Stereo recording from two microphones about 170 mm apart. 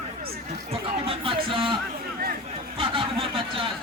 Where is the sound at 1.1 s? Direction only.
30° right (ahead or behind).